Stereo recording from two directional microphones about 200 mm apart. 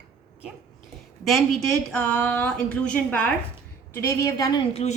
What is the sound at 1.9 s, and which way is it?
A woman's voice, 5° left (ahead or behind).